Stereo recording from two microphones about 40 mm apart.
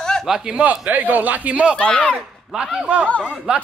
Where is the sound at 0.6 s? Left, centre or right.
Right.